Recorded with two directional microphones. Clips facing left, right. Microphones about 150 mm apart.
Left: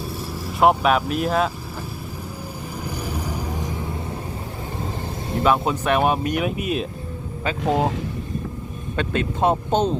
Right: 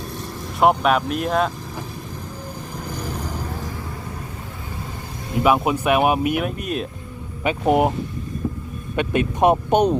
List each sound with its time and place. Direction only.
0.6 s speech: centre (ahead or behind)
2.9 s vehicle: 10° left (ahead or behind)
5.4 s speech: 10° right (ahead or behind)
6.4 s speech: centre (ahead or behind)
7.4 s speech: 20° right (ahead or behind)
9.0 s speech: 15° right (ahead or behind)